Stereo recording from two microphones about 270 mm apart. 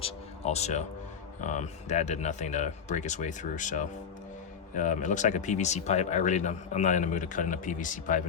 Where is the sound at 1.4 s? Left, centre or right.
Left.